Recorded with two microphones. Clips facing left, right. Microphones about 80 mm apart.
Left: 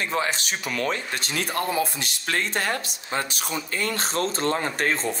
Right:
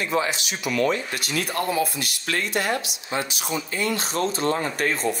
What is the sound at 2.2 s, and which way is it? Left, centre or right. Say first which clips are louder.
Speech: right 1 dB; left.